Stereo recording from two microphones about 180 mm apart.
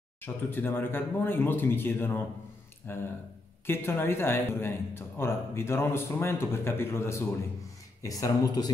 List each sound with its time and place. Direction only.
0.2 s a man's voice: 10° left (ahead or behind)